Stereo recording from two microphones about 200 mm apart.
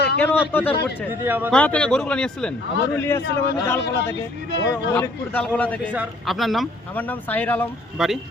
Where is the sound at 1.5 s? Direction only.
5° left (ahead or behind).